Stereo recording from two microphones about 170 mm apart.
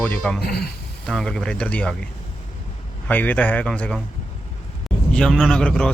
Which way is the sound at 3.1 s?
10° left (ahead or behind).